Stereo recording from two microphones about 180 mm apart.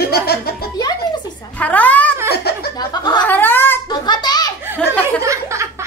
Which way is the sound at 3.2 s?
10° left (ahead or behind).